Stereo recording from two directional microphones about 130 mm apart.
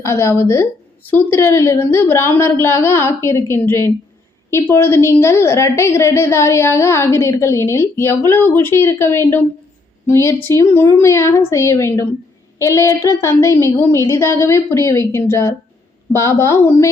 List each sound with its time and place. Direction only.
0.0 s a woman's voice: 20° left (ahead or behind)